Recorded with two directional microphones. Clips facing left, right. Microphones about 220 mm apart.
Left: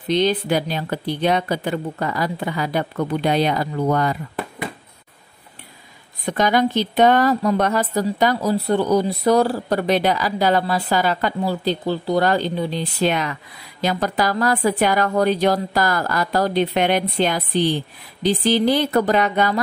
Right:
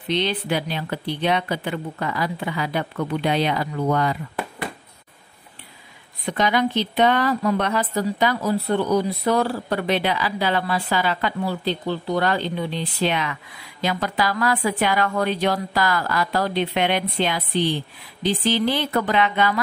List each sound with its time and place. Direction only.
0.1 s speech: 45° left (ahead or behind)
6.2 s speech: 45° left (ahead or behind)